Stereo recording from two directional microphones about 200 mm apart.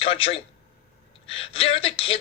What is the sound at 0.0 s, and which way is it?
A man's voice, 30° left (ahead or behind).